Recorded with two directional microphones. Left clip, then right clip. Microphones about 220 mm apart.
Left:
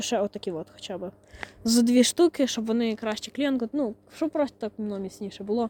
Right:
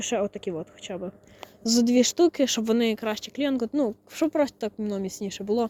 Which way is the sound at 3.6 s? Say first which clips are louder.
Right 3 dB; 5° right (ahead or behind).